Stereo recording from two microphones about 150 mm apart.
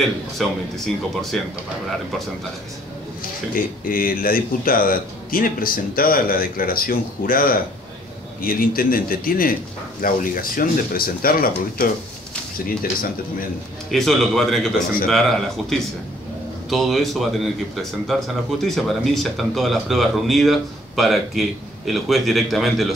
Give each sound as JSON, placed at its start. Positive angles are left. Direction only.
{"t": 0.4, "sound": "speech", "side_deg": 0}
{"t": 3.8, "sound": "speech", "side_deg": 75}
{"t": 13.8, "sound": "speech", "side_deg": 0}
{"t": 16.6, "sound": "speech", "side_deg": 0}